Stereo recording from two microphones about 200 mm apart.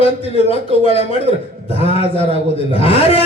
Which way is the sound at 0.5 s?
30° left (ahead or behind).